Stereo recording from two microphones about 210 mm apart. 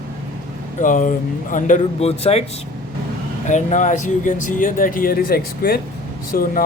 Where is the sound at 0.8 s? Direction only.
40° left (ahead or behind).